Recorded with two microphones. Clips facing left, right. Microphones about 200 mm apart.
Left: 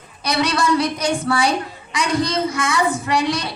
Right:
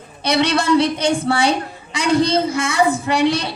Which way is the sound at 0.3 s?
25° right (ahead or behind).